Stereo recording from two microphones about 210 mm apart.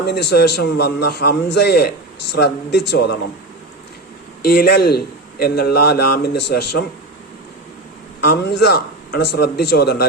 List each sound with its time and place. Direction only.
0.0 s a man's voice: 50° left (ahead or behind)
4.4 s a man's voice: 50° left (ahead or behind)
8.2 s a man's voice: 50° left (ahead or behind)